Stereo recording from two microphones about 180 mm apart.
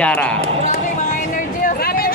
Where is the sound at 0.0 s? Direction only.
5° left (ahead or behind).